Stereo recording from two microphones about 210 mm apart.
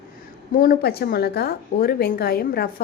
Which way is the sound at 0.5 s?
40° left (ahead or behind).